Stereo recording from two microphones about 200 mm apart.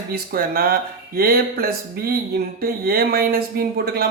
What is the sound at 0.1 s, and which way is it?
Speech, 50° right (ahead or behind).